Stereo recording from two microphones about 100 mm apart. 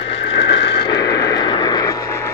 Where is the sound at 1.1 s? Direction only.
40° left (ahead or behind).